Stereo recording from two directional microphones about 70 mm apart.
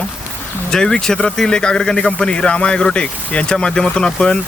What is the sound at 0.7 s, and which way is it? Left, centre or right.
Speech, centre.